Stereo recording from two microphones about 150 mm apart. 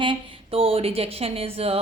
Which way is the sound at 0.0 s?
35° right (ahead or behind).